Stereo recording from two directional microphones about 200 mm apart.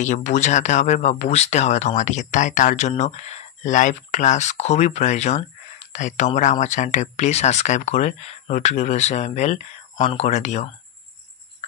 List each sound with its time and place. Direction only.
0.0 s speech: 35° left (ahead or behind)